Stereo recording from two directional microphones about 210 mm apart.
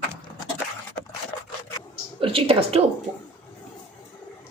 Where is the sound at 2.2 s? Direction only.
25° right (ahead or behind).